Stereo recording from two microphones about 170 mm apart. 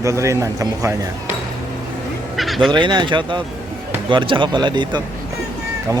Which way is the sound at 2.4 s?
Centre (ahead or behind).